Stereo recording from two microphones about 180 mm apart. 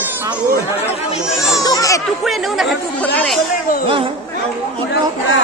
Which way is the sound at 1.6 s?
20° left (ahead or behind).